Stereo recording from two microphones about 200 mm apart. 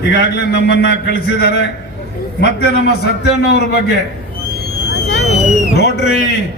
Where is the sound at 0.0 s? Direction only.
60° left (ahead or behind).